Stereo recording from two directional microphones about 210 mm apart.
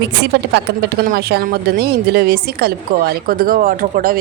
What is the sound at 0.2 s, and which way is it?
A woman's voice, 55° right (ahead or behind).